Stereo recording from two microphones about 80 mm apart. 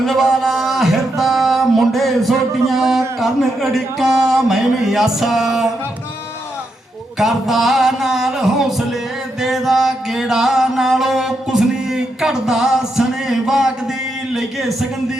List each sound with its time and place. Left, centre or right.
0.0 s a sound: centre
3.2 s speech: centre
7.2 s music: centre